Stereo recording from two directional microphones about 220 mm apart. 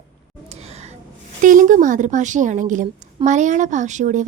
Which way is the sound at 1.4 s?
35° right (ahead or behind).